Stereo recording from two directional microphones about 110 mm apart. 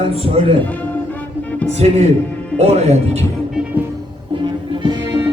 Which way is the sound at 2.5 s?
70° right (ahead or behind).